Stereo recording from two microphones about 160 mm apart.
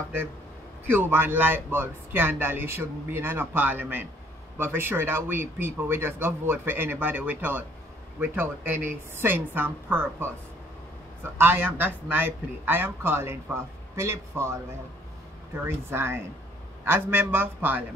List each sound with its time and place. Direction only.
0.8 s speech: 15° right (ahead or behind)
11.3 s speech: 15° right (ahead or behind)